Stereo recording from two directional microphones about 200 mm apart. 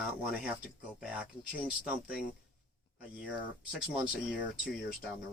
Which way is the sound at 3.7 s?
5° right (ahead or behind).